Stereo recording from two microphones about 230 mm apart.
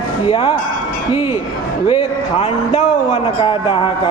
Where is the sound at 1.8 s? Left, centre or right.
Left.